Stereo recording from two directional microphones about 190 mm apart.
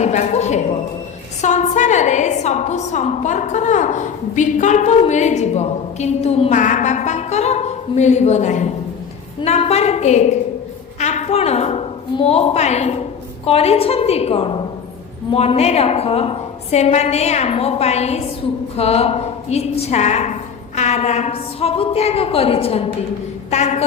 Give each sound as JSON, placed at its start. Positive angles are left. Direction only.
{"t": 0.0, "sound": "a woman's voice", "side_deg": 35}
{"t": 11.0, "sound": "a sound", "side_deg": 35}
{"t": 13.4, "sound": "a woman's voice", "side_deg": 30}